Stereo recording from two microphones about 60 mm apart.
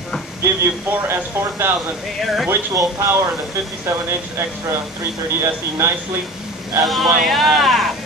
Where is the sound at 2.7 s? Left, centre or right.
Right.